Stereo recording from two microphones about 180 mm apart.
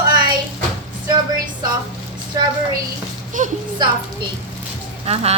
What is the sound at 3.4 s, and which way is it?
Speech, 45° right (ahead or behind).